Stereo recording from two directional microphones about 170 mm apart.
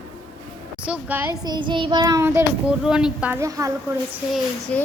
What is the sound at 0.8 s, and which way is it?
A child's voice, 10° right (ahead or behind).